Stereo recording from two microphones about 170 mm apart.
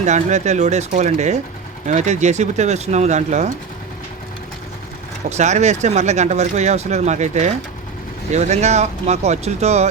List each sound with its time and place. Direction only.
0.0 s speech: 40° right (ahead or behind)
5.3 s speech: 40° right (ahead or behind)